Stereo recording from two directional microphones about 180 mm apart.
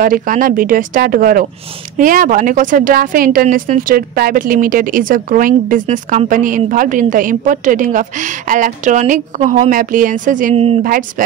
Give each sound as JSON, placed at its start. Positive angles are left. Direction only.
{"t": 0.0, "sound": "a woman's voice", "side_deg": -50}
{"t": 10.8, "sound": "a woman's voice", "side_deg": -50}